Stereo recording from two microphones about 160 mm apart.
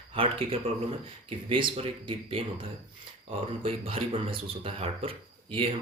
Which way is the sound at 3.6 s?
35° right (ahead or behind).